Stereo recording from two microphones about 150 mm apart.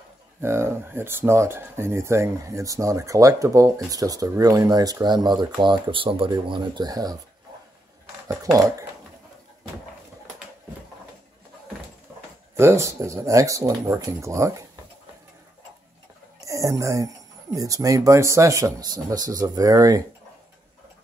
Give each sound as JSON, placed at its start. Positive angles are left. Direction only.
{"t": 0.4, "sound": "speech", "side_deg": -15}
{"t": 8.3, "sound": "speech", "side_deg": -20}
{"t": 12.1, "sound": "a sound", "side_deg": -10}
{"t": 12.5, "sound": "speech", "side_deg": -20}
{"t": 16.4, "sound": "speech", "side_deg": -20}